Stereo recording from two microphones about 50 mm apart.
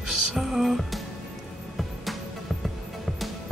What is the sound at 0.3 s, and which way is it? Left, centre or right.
Music, centre.